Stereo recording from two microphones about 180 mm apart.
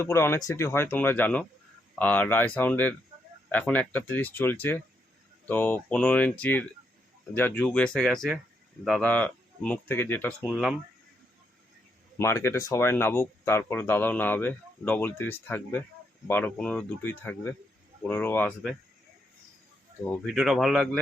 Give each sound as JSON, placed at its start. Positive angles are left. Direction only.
{"t": 0.0, "sound": "speech", "side_deg": 15}
{"t": 10.4, "sound": "speech", "side_deg": 0}
{"t": 12.1, "sound": "speech", "side_deg": 15}
{"t": 20.2, "sound": "speech", "side_deg": 0}